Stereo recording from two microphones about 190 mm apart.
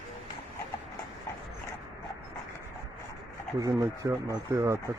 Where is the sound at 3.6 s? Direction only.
15° right (ahead or behind).